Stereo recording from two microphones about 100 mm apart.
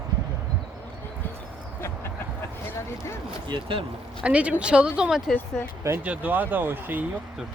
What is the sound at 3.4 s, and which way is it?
Speech, 60° right (ahead or behind).